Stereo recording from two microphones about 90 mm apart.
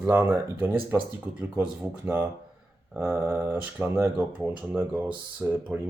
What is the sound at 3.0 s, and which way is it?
Speech, 25° right (ahead or behind).